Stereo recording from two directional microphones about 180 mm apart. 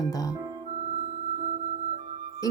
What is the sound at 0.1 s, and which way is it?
Speech, 20° left (ahead or behind).